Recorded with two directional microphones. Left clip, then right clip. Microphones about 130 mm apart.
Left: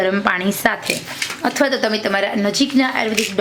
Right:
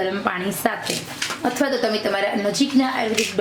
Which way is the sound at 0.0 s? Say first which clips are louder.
Left 6 dB; 35° left (ahead or behind).